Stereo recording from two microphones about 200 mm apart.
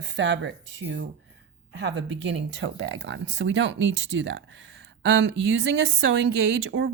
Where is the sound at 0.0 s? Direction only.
60° right (ahead or behind).